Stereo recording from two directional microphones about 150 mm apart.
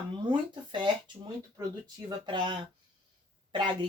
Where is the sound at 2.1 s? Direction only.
30° right (ahead or behind).